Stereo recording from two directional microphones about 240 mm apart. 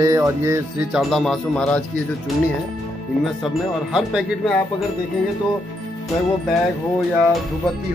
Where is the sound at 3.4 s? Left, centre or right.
Centre.